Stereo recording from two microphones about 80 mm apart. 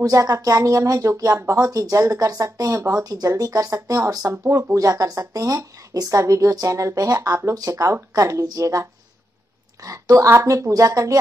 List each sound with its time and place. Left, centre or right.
0.0 s speech: right
9.8 s speech: right